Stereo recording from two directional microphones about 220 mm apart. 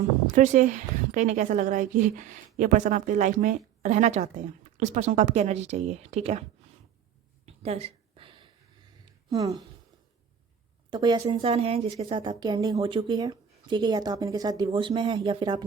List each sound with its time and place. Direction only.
0.3 s a woman's voice: 35° right (ahead or behind)
7.4 s a sound: 25° right (ahead or behind)
9.3 s speech: 15° right (ahead or behind)
10.9 s a woman's voice: 20° right (ahead or behind)